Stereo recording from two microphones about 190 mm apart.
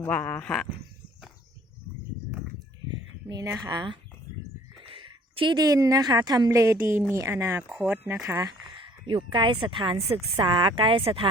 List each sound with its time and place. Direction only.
0.0 s speech: 10° left (ahead or behind)
3.2 s a woman's voice: 15° right (ahead or behind)
9.0 s speech: 25° right (ahead or behind)